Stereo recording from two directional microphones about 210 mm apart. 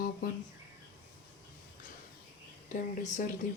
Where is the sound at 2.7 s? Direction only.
35° left (ahead or behind).